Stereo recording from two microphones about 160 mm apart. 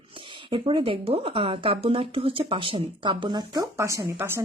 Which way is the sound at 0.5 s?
30° right (ahead or behind).